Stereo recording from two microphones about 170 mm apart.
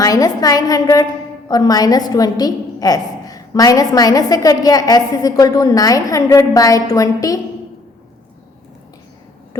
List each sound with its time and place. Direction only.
0.0 s a woman's voice: 20° left (ahead or behind)